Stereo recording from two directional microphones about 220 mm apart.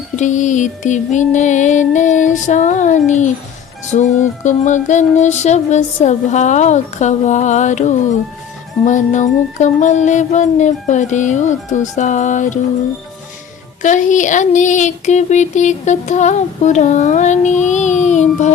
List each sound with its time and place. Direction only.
0.2 s speech: 35° left (ahead or behind)
13.8 s speech: 35° left (ahead or behind)